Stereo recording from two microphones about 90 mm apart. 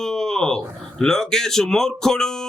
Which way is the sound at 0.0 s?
5° left (ahead or behind).